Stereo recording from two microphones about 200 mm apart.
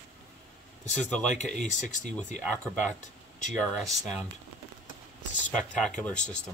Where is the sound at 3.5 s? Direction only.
Centre (ahead or behind).